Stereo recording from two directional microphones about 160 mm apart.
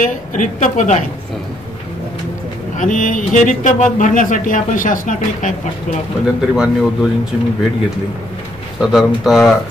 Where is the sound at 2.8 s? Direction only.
50° left (ahead or behind).